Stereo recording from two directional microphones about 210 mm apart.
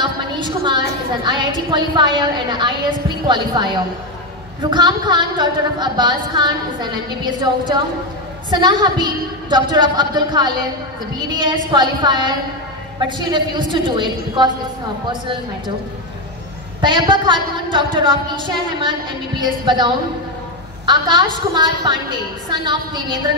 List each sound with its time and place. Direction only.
0.0 s a woman's voice: 20° right (ahead or behind)
16.8 s a woman's voice: 20° right (ahead or behind)